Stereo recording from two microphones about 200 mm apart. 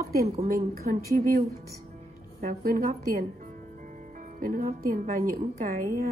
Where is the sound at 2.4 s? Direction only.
40° right (ahead or behind).